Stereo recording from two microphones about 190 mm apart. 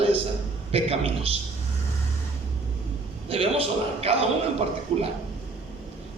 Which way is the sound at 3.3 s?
30° right (ahead or behind).